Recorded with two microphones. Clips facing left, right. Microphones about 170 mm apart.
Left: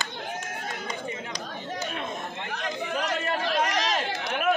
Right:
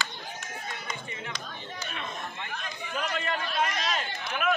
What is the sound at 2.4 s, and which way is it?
Chatter, 75° left (ahead or behind).